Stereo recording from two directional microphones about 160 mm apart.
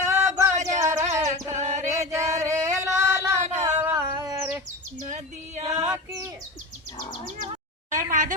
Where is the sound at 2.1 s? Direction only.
20° right (ahead or behind).